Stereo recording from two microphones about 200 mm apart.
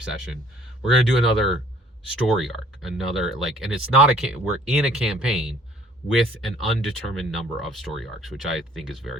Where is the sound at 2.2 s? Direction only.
Centre (ahead or behind).